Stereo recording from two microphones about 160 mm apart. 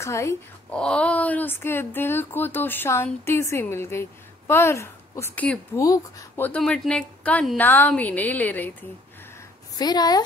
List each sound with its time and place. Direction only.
0.0 s speech: 15° left (ahead or behind)
0.7 s speech: 5° left (ahead or behind)
5.8 s speech: 20° left (ahead or behind)
9.8 s speech: 25° left (ahead or behind)